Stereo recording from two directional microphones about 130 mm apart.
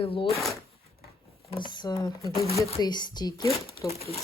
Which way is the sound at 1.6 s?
35° left (ahead or behind).